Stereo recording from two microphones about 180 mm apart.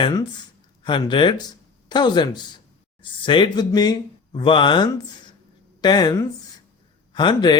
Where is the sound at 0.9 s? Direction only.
25° left (ahead or behind).